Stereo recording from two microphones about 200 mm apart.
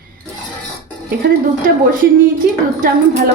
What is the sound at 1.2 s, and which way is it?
A woman's voice, 45° right (ahead or behind).